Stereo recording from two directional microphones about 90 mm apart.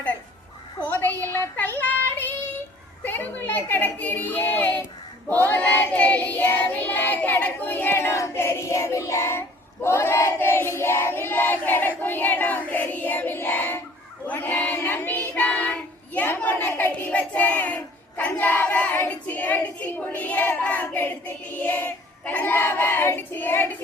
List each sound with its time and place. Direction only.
0.9 s child singing: 20° left (ahead or behind)
3.0 s a sound: 20° left (ahead or behind)
5.3 s child singing: 20° left (ahead or behind)